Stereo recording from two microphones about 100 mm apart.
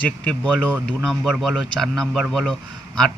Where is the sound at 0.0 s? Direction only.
15° left (ahead or behind).